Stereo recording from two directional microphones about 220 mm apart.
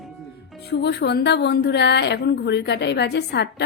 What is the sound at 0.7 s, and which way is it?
A woman's voice, 50° left (ahead or behind).